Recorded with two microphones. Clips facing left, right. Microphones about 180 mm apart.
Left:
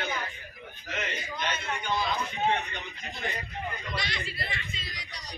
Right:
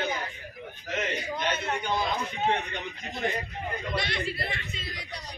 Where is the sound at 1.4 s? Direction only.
55° right (ahead or behind).